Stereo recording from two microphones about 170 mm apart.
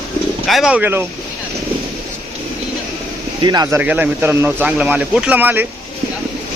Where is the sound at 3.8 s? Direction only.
10° right (ahead or behind).